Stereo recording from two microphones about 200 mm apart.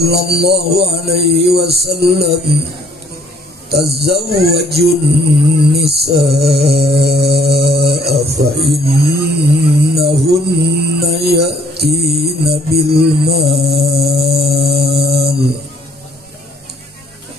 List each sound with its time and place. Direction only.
0.0 s mantra: 55° right (ahead or behind)
3.9 s mantra: 55° right (ahead or behind)
8.7 s music: 50° right (ahead or behind)
12.4 s mantra: 55° right (ahead or behind)